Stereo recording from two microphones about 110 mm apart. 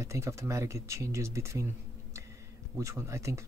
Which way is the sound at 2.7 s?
25° right (ahead or behind).